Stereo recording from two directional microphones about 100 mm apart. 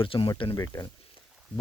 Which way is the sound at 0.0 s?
60° left (ahead or behind).